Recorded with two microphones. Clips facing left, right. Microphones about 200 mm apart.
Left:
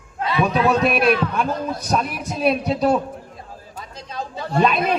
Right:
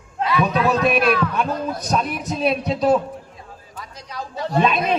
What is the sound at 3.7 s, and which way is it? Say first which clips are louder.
Speech: left 2 dB; 25° left (ahead or behind).